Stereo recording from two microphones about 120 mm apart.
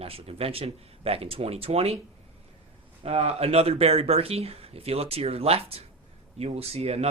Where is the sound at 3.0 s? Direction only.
60° right (ahead or behind).